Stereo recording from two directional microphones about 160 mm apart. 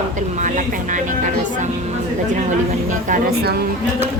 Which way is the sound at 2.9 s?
55° right (ahead or behind).